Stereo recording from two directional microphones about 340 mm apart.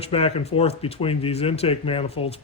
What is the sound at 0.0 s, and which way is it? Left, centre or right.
Speech, centre.